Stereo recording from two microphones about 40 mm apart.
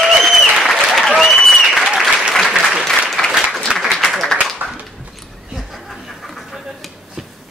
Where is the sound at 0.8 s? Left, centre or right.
Centre.